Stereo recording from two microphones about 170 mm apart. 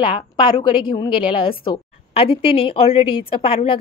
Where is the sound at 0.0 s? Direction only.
30° left (ahead or behind).